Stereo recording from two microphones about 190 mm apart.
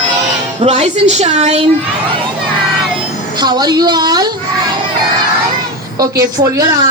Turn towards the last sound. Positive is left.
turn(degrees=-20)  # may be behind; listen again after turning